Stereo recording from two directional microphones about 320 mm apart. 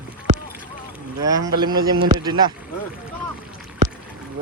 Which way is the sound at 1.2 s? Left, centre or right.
Centre.